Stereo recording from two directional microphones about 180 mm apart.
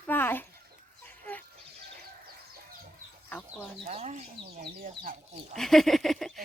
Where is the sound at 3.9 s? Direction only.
35° right (ahead or behind).